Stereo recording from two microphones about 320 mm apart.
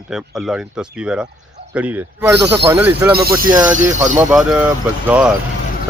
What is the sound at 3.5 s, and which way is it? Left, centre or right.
Speech, centre.